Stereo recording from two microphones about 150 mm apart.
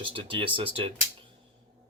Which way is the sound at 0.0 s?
35° right (ahead or behind).